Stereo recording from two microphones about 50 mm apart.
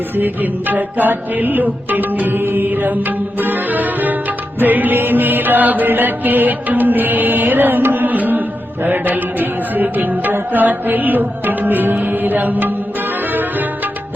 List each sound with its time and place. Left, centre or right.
0.2 s chant: right
13.3 s music: right